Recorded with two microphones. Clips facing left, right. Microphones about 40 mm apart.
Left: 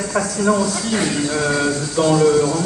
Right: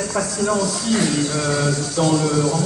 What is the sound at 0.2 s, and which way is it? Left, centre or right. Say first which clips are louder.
Speech: left 3 dB; left.